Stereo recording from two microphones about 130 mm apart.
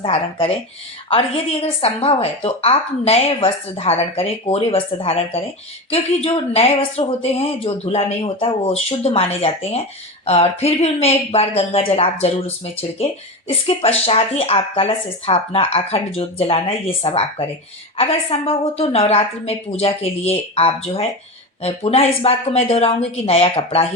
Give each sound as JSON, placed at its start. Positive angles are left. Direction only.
{"t": 0.0, "sound": "speech", "side_deg": 45}
{"t": 1.6, "sound": "speech", "side_deg": 50}